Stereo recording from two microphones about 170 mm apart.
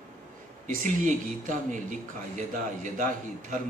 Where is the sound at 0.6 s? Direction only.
50° right (ahead or behind).